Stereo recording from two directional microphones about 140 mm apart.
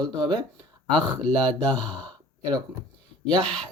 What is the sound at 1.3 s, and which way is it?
Speech, 10° left (ahead or behind).